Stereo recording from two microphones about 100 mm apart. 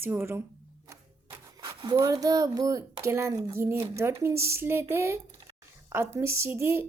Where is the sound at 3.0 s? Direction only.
30° right (ahead or behind).